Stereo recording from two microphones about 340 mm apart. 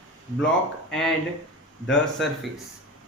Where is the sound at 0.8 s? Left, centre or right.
Centre.